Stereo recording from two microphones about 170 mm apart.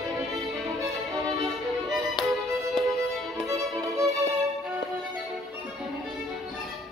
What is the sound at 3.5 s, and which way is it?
Violin, 20° right (ahead or behind).